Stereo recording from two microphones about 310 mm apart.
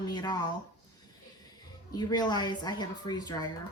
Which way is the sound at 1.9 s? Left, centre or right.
Centre.